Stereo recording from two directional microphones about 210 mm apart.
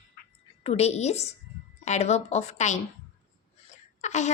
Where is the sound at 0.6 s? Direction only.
30° left (ahead or behind).